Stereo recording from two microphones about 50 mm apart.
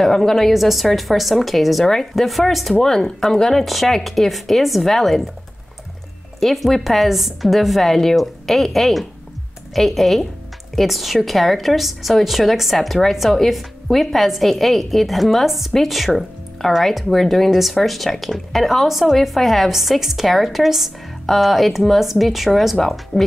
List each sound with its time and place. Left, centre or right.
0.0 s a woman's voice: centre
6.4 s a woman's voice: centre